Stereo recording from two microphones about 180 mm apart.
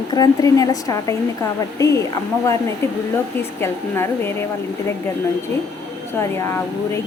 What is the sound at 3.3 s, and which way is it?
Speech, 15° left (ahead or behind).